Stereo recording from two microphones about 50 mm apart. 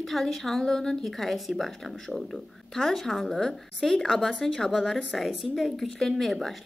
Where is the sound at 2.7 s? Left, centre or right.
Centre.